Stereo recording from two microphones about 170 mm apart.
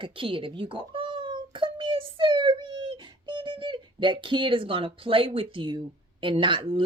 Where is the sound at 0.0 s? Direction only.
30° right (ahead or behind).